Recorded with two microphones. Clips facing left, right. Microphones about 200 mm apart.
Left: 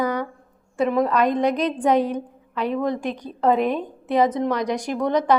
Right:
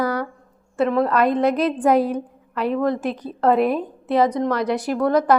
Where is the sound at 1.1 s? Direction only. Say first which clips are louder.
Right 2 dB; 5° right (ahead or behind).